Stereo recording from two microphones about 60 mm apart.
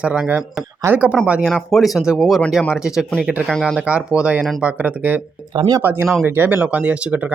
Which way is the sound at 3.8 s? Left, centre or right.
Right.